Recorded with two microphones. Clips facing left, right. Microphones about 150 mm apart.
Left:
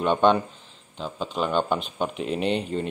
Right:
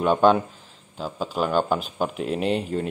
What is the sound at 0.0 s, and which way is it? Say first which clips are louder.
A man's voice: right 2 dB; 5° right (ahead or behind).